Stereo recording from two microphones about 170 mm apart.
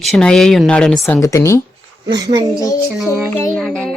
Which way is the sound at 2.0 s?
25° right (ahead or behind).